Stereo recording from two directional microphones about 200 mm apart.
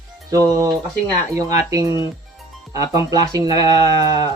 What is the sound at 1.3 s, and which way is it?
Speech, 15° right (ahead or behind).